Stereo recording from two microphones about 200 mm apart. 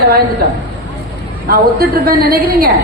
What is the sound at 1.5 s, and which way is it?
A woman's voice, 50° right (ahead or behind).